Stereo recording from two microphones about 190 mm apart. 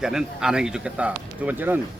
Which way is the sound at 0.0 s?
5° right (ahead or behind).